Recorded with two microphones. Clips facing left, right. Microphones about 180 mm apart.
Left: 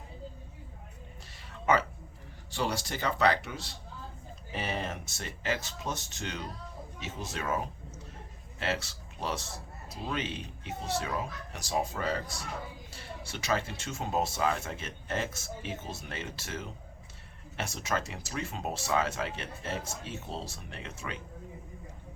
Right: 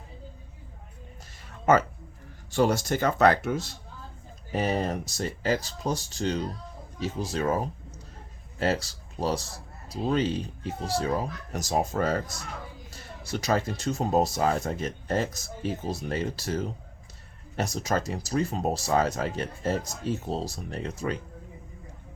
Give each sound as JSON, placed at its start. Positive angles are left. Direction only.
{"t": 1.7, "sound": "speech", "side_deg": -45}